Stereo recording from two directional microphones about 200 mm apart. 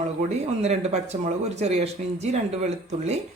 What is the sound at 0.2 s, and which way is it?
Speech, 35° right (ahead or behind).